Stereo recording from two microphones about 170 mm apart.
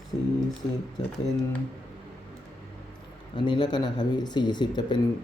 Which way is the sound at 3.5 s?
25° left (ahead or behind).